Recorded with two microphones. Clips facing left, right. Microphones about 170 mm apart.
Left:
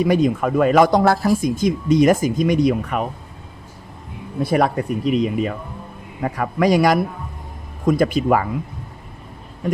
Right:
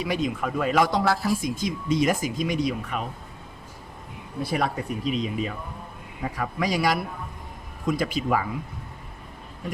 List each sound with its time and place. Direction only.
0.0 s speech: 45° left (ahead or behind)
4.5 s speech: 60° left (ahead or behind)